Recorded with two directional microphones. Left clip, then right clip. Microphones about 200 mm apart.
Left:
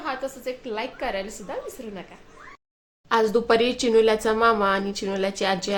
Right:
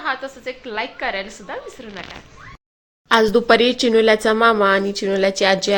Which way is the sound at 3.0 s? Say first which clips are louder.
Right 6 dB; 25° right (ahead or behind).